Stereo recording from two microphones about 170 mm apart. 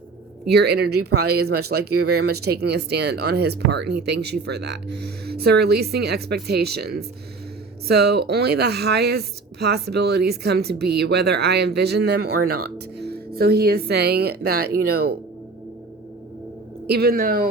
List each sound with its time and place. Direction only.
0.4 s speech: 70° right (ahead or behind)
16.8 s speech: 70° right (ahead or behind)